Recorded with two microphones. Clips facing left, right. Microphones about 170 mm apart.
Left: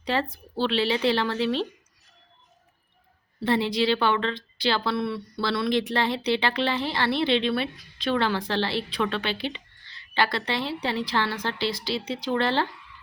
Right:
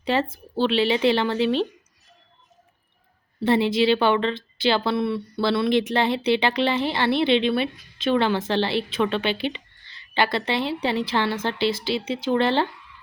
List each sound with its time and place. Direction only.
0.0 s a woman's voice: 25° right (ahead or behind)
3.7 s a woman's voice: 25° right (ahead or behind)